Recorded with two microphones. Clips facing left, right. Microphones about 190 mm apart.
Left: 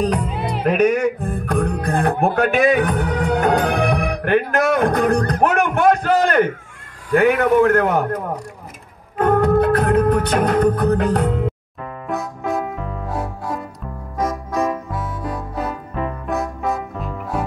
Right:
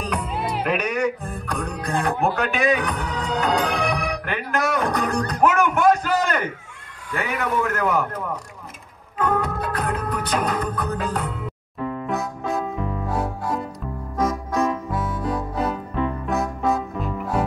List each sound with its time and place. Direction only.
0.7 s music: 45° left (ahead or behind)
7.2 s a man's voice: 60° left (ahead or behind)
9.2 s music: 60° left (ahead or behind)
12.1 s music: centre (ahead or behind)